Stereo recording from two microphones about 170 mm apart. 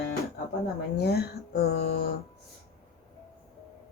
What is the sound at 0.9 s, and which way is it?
Speech, 70° left (ahead or behind).